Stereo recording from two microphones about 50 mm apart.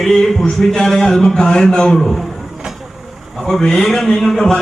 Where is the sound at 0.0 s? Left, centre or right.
Centre.